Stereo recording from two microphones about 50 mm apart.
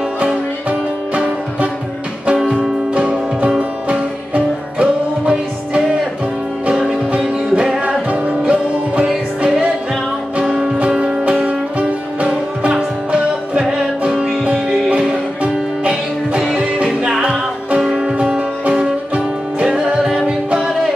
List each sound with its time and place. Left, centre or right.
0.2 s music: right
2.3 s music: centre
2.9 s music: right
7.8 s music: right